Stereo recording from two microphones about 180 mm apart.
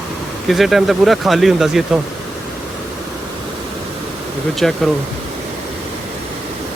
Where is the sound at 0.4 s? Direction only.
Centre (ahead or behind).